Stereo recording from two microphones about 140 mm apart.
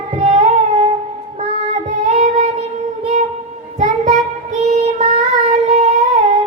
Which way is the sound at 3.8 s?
55° right (ahead or behind).